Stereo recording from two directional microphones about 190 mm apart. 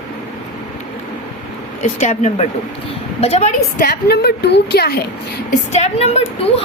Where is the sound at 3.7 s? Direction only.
50° left (ahead or behind).